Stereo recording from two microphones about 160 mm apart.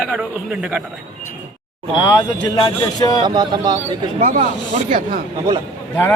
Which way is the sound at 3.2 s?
30° right (ahead or behind).